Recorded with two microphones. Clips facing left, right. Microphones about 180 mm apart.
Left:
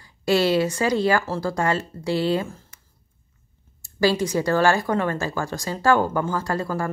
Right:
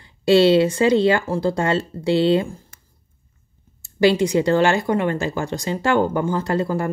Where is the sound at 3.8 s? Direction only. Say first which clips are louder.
Right 4 dB; 20° right (ahead or behind).